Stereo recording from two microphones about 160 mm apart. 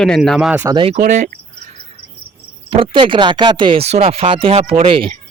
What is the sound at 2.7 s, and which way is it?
Speech, 35° right (ahead or behind).